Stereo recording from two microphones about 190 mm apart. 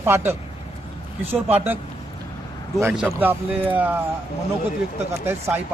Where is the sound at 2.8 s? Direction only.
5° right (ahead or behind).